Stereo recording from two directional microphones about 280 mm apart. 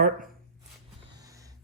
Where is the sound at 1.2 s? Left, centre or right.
Centre.